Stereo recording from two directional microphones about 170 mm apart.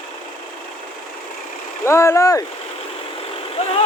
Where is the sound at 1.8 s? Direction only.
15° left (ahead or behind).